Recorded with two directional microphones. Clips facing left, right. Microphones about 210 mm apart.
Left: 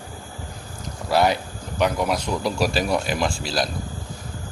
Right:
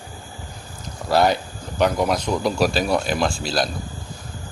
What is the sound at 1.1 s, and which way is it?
Speech, 35° right (ahead or behind).